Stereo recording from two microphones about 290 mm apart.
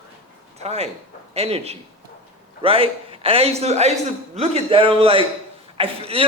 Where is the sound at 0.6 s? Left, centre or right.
Right.